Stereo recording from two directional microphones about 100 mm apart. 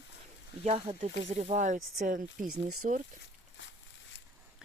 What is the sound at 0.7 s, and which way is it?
Speech, 75° right (ahead or behind).